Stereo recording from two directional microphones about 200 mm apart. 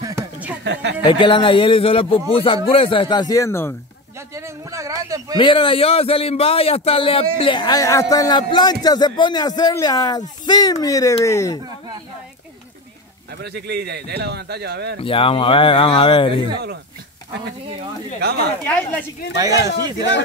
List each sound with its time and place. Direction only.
0.0 s a sound: 10° right (ahead or behind)
1.0 s a man's voice: 25° left (ahead or behind)
4.6 s speech: 15° right (ahead or behind)
5.4 s a man's voice: 25° left (ahead or behind)
13.4 s speech: 55° right (ahead or behind)
15.0 s a man's voice: 25° left (ahead or behind)
18.7 s speech: 10° left (ahead or behind)
19.3 s speech: 20° right (ahead or behind)